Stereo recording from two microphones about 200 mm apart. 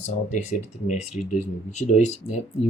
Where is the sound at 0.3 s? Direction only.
35° left (ahead or behind).